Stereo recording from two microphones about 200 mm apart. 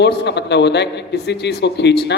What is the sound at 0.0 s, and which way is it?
A man's voice, 60° left (ahead or behind).